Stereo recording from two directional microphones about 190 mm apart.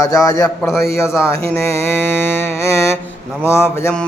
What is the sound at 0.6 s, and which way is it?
Mantra, centre (ahead or behind).